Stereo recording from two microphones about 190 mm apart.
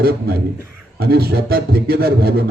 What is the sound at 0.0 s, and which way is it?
A man's voice, 55° right (ahead or behind).